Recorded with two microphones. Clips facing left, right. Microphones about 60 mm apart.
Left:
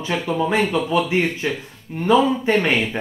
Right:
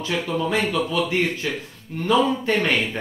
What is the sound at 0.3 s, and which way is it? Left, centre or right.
Speech, left.